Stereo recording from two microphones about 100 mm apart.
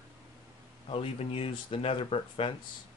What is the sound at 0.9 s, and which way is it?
Speech, 75° left (ahead or behind).